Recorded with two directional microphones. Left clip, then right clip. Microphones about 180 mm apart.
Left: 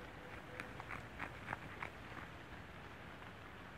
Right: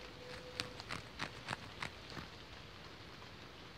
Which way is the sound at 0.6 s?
25° right (ahead or behind).